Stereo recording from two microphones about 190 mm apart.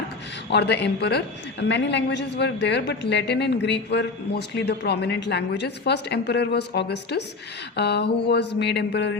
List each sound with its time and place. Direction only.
0.5 s a woman's voice: 60° left (ahead or behind)